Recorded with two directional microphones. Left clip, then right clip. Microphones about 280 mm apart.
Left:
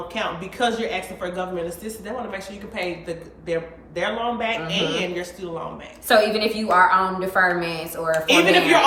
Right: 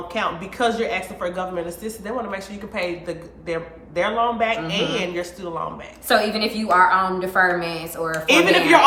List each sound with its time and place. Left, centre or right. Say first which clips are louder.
0.1 s a woman's voice: right 4 dB; centre
6.1 s a woman's voice: left 2 dB; centre
8.3 s a woman's voice: right 2 dB; centre